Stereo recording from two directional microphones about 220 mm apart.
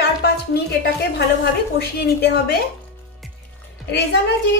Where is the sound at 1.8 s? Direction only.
45° left (ahead or behind).